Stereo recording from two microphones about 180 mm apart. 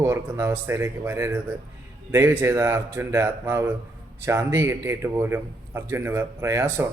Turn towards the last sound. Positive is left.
turn(degrees=-15)  # may be behind; listen again after turning